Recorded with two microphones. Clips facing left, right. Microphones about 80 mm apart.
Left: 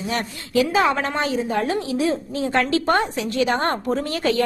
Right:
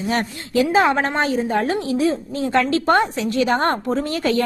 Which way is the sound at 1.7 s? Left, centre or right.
Right.